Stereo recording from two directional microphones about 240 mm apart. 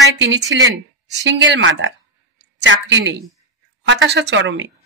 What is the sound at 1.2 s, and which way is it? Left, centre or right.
Speech, right.